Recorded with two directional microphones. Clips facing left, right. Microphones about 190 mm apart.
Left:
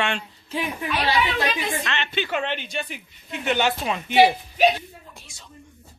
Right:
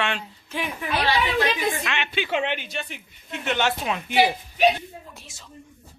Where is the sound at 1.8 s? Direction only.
10° right (ahead or behind).